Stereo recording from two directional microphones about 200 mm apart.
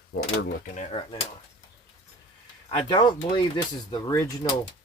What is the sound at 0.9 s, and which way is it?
Speech, 25° left (ahead or behind).